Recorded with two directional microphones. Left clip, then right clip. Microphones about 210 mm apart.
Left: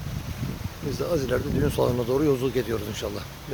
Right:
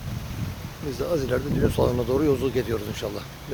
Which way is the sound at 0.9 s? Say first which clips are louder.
Even; 15° left (ahead or behind).